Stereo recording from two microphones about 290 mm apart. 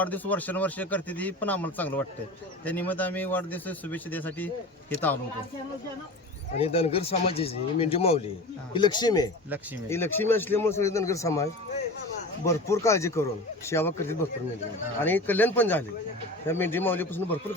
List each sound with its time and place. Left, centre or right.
0.0 s a man's voice: centre
6.6 s a man's voice: left
12.5 s a man's voice: centre